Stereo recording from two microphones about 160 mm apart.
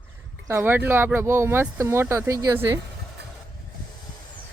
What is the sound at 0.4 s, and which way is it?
Speech, 15° right (ahead or behind).